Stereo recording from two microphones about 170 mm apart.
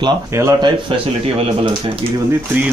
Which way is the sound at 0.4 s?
15° right (ahead or behind).